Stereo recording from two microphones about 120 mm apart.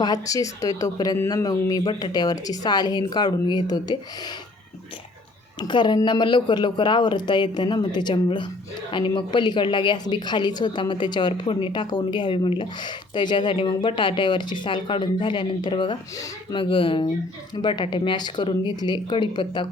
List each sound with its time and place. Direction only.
0.0 s speech: 30° left (ahead or behind)
5.5 s speech: 40° left (ahead or behind)
16.6 s speech: 45° left (ahead or behind)